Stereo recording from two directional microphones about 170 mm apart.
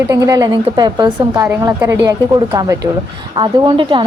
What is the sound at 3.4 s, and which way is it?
Speech, 30° right (ahead or behind).